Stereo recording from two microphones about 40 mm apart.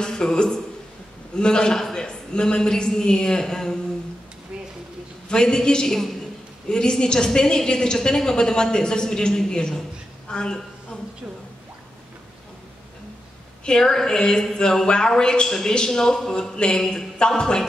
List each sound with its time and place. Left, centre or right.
0.0 s a sound: centre
1.3 s a woman's voice: centre
5.3 s a woman's voice: centre
13.7 s a woman's voice: centre